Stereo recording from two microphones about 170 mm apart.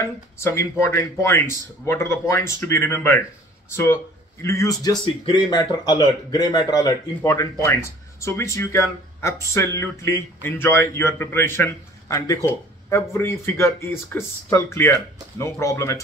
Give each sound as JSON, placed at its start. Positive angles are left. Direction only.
{"t": 0.0, "sound": "speech", "side_deg": 15}